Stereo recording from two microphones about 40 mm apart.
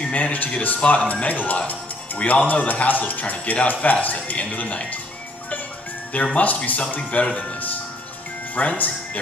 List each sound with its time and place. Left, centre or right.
0.1 s speech: left
1.7 s music: left
2.4 s speech: left
6.3 s speech: left
8.5 s speech: left